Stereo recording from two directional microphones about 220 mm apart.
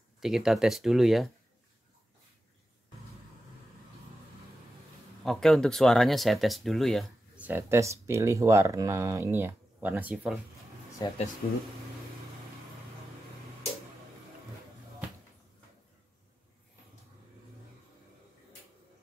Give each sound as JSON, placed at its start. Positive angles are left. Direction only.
{"t": 0.2, "sound": "speech", "side_deg": 0}
{"t": 5.2, "sound": "speech", "side_deg": 0}
{"t": 11.0, "sound": "speech", "side_deg": 20}
{"t": 11.4, "sound": "speech", "side_deg": 35}